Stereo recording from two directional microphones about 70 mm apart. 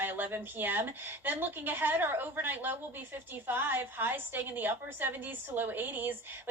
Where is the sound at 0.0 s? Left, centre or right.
Right.